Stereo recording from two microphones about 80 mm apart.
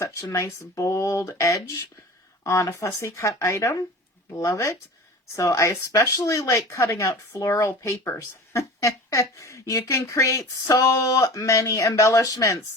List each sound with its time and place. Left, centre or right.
0.0 s speech: left